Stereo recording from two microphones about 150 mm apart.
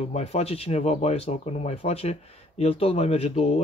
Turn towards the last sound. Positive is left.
turn(degrees=45)  # may be behind; listen again after turning